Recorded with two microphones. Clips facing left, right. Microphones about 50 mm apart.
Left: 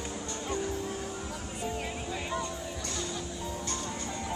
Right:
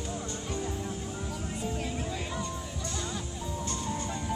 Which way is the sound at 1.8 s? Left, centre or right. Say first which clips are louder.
Right 1 dB; centre.